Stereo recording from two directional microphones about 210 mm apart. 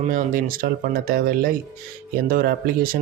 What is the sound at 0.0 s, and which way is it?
Speech, 40° right (ahead or behind).